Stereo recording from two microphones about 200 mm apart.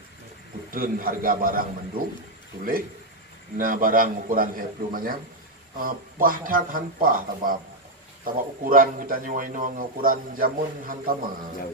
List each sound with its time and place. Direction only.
0.7 s a man's voice: 45° right (ahead or behind)